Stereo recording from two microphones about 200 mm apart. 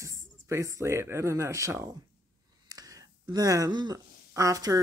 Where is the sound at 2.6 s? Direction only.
20° right (ahead or behind).